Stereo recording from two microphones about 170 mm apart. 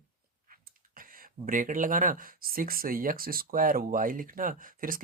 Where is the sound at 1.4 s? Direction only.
50° right (ahead or behind).